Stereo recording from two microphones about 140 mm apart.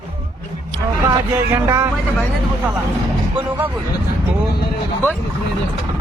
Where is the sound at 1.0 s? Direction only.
15° right (ahead or behind).